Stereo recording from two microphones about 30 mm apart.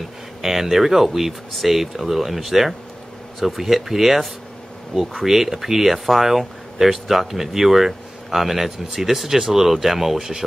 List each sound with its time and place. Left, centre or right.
0.4 s speech: centre
5.2 s speech: centre